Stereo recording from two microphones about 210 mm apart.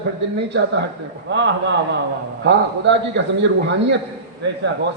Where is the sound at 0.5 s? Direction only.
55° right (ahead or behind).